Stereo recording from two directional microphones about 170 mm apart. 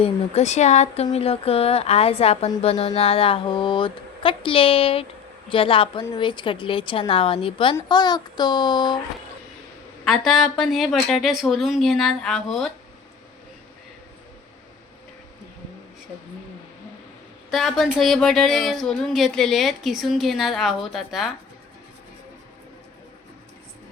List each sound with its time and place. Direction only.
0.0 s a child's voice: 40° left (ahead or behind)
10.0 s speech: centre (ahead or behind)
17.5 s speech: centre (ahead or behind)